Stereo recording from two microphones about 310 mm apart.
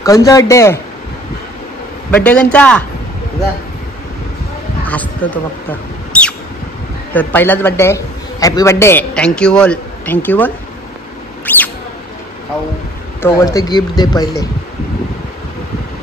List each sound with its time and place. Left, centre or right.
0.0 s speech: centre
2.0 s a man's voice: centre
4.8 s speech: centre
7.2 s a man's voice: centre
11.4 s mouse: centre
13.2 s speech: centre